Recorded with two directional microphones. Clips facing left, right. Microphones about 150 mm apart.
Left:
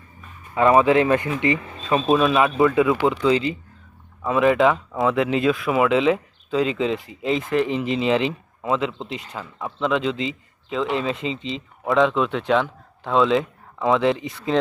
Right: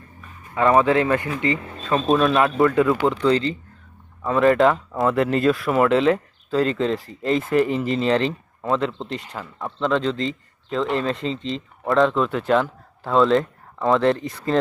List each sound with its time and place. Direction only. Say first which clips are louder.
0.7 s speech: left 1 dB; 15° left (ahead or behind)
1.9 s speech: even; 5° left (ahead or behind)